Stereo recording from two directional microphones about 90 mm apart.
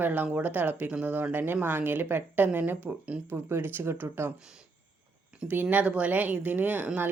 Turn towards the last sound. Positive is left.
turn(degrees=-20)  # may be behind; listen again after turning